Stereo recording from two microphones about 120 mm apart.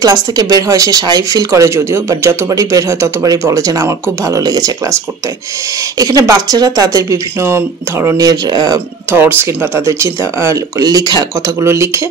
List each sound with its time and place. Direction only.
0.0 s speech: 30° right (ahead or behind)
5.9 s speech: 30° right (ahead or behind)
9.1 s speech: 20° right (ahead or behind)